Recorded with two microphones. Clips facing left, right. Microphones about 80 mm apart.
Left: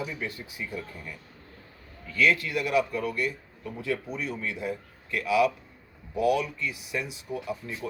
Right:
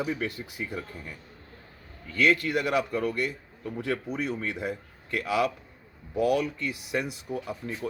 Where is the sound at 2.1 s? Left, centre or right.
Right.